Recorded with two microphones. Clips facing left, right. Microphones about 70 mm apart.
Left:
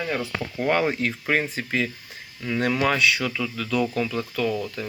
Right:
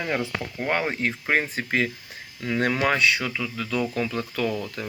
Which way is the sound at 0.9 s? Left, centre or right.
Right.